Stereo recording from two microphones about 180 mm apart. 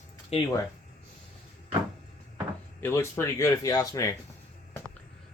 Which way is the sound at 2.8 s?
15° left (ahead or behind).